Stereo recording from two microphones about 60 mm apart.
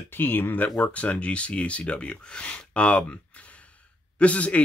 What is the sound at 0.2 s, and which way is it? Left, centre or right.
Speech, left.